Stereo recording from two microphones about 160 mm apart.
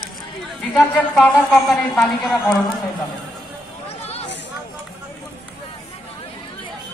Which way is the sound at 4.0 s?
40° left (ahead or behind).